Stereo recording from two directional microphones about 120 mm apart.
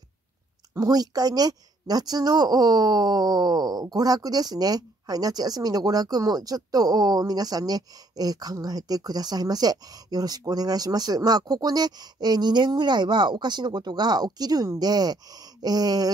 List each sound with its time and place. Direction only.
0.7 s a woman's voice: 30° right (ahead or behind)